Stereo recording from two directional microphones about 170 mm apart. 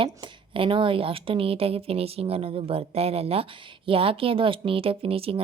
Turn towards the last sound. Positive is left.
turn(degrees=-35)  # may be behind; listen again after turning